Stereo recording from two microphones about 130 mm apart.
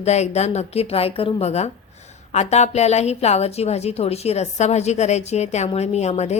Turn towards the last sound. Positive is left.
turn(degrees=55)  # may be behind; listen again after turning